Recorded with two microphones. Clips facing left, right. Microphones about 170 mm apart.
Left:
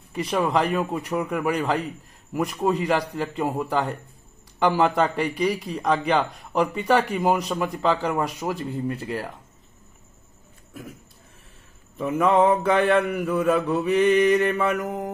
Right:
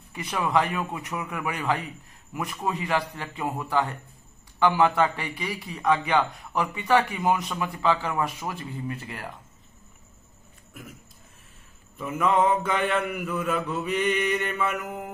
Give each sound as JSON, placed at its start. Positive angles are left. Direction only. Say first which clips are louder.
{"t": 0.1, "sound": "a man's voice", "louder": "left 3 dB", "side_deg": 35}
{"t": 10.7, "sound": "a sound", "louder": "left 5 dB", "side_deg": 35}
{"t": 12.0, "sound": "a man's voice", "louder": "left 4 dB", "side_deg": 30}